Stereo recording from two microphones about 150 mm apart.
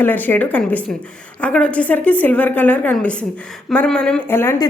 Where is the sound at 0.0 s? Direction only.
10° left (ahead or behind).